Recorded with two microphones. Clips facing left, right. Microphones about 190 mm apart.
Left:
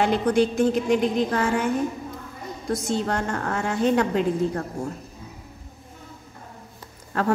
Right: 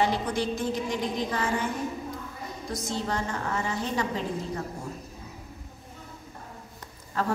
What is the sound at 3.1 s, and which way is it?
A woman's voice, 60° left (ahead or behind).